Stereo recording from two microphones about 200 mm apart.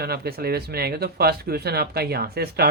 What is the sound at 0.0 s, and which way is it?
Speech, 50° right (ahead or behind).